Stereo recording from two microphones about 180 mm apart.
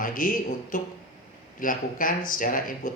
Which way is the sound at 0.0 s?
50° left (ahead or behind).